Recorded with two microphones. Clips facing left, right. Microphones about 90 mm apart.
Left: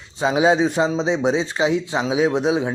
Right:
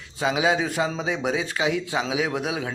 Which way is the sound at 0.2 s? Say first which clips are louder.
Left 6 dB; 25° left (ahead or behind).